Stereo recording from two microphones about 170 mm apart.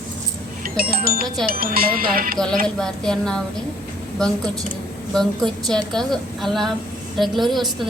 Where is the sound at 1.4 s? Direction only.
60° right (ahead or behind).